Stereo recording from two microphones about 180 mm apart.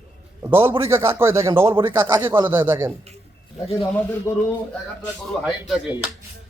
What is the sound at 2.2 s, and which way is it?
Speech, 25° right (ahead or behind).